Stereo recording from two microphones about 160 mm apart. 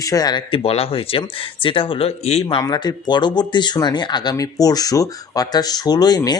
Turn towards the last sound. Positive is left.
turn(degrees=25)  # may be behind; listen again after turning